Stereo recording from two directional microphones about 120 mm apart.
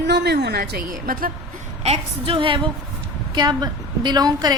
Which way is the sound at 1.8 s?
55° right (ahead or behind).